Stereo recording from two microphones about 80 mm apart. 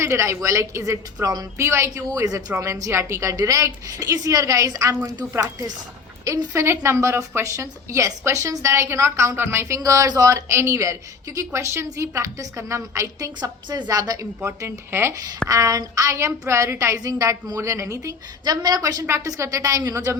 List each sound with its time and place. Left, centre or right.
0.0 s a woman's voice: right
1.5 s a woman's voice: right
2.0 s a woman's voice: right
13.4 s a woman's voice: right
14.4 s a woman's voice: right
15.4 s a woman's voice: right
19.0 s a woman's voice: right